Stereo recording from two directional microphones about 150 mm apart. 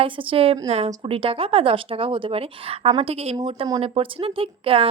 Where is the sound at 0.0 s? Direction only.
35° right (ahead or behind).